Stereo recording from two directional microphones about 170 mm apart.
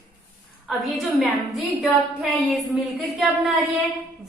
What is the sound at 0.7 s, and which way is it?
Speech, centre (ahead or behind).